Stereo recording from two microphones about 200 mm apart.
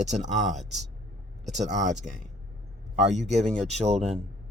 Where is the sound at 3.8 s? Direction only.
30° right (ahead or behind).